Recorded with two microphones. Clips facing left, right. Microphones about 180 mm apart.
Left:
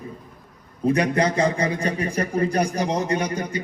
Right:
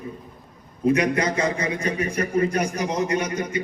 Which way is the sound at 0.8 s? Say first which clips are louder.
Even; 30° left (ahead or behind).